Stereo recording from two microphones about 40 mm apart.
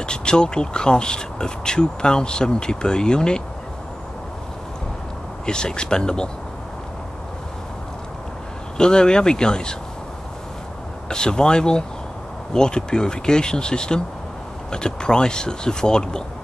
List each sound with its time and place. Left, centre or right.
0.0 s speech: left
5.4 s speech: centre
8.7 s speech: centre
11.1 s speech: centre